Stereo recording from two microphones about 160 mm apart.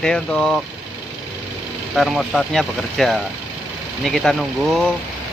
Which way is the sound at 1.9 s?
Centre (ahead or behind).